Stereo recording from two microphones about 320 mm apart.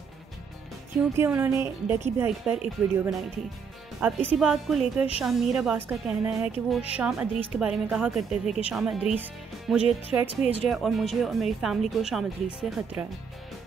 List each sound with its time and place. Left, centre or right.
1.1 s a woman's voice: centre
10.2 s speech: centre
10.7 s a woman's voice: centre